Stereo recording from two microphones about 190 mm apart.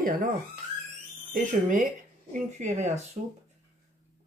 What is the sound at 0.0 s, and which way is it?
Speech, 45° right (ahead or behind).